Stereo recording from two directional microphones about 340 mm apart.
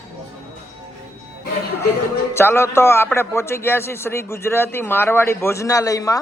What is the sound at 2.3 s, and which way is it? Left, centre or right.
A man's voice, centre.